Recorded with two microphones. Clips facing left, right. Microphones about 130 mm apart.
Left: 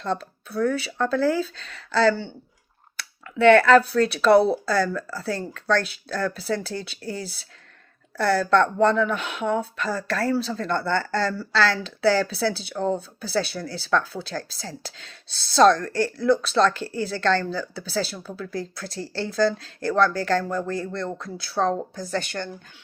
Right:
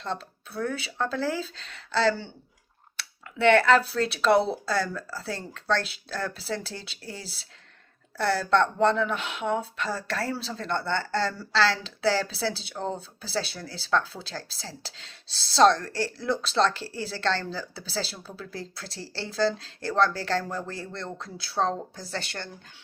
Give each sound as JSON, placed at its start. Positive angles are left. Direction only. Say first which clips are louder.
{"t": 0.0, "sound": "speech", "louder": "left 6 dB", "side_deg": -25}